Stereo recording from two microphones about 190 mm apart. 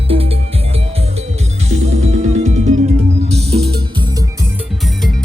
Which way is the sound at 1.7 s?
35° right (ahead or behind).